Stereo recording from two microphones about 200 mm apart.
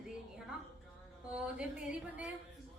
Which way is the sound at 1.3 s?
5° right (ahead or behind).